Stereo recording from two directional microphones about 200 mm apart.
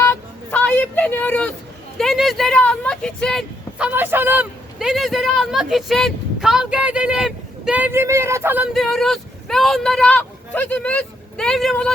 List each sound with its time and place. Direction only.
0.0 s telephone dialing: 10° left (ahead or behind)
2.0 s speech: centre (ahead or behind)